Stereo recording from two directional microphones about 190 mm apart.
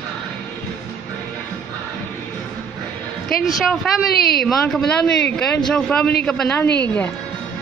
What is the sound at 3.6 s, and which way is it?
A woman's voice, centre (ahead or behind).